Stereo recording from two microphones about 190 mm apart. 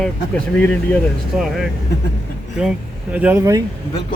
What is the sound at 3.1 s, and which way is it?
Speech, 10° right (ahead or behind).